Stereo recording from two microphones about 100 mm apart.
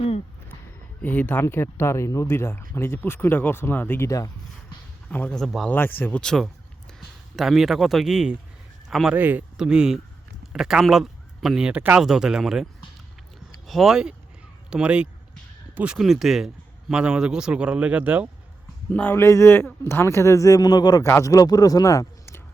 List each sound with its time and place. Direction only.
1.0 s speech: 15° left (ahead or behind)
5.0 s a man's voice: 15° left (ahead or behind)
5.4 s a man's voice: centre (ahead or behind)
5.6 s speech: 20° left (ahead or behind)
6.2 s a man's voice: 5° left (ahead or behind)
9.1 s speech: 15° right (ahead or behind)
9.6 s a man's voice: 5° right (ahead or behind)
13.7 s a man's voice: centre (ahead or behind); by 18.3 s 15° right (ahead or behind)
18.9 s speech: 15° left (ahead or behind)
19.2 s speech: 25° left (ahead or behind)